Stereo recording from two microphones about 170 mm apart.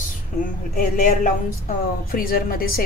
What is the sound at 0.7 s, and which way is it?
A woman's voice, 50° left (ahead or behind).